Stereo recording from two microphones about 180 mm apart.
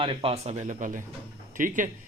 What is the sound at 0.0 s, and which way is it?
A man's voice, 30° right (ahead or behind).